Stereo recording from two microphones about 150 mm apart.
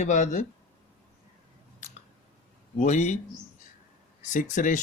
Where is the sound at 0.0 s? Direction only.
55° left (ahead or behind).